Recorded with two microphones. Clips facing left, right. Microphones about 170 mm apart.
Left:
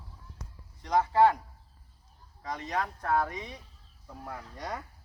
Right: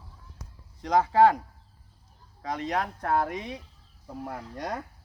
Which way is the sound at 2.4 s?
70° right (ahead or behind).